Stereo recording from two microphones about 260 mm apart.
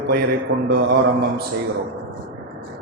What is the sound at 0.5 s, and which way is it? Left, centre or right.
Mantra, right.